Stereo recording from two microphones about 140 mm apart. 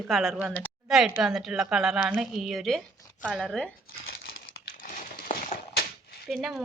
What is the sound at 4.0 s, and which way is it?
Crumpling, 90° left.